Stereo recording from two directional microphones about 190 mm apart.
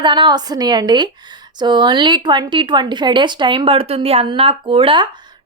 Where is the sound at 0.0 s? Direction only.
25° right (ahead or behind).